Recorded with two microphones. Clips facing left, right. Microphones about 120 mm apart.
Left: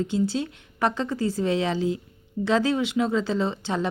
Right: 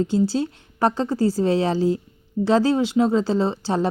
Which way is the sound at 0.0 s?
35° right (ahead or behind).